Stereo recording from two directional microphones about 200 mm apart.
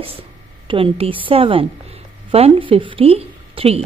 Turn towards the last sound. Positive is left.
turn(degrees=-30)  # may be behind; listen again after turning